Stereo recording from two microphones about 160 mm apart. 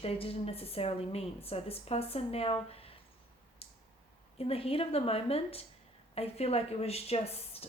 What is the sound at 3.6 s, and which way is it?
Tick-tock, 40° left (ahead or behind).